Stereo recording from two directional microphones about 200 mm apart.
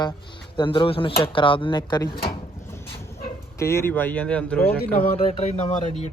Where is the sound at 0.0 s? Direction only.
25° left (ahead or behind).